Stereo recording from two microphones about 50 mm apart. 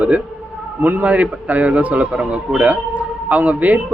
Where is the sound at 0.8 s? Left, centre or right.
Right.